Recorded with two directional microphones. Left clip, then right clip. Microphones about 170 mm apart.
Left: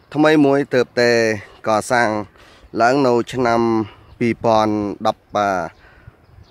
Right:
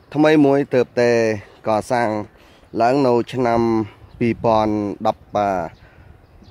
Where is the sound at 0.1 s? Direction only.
15° left (ahead or behind).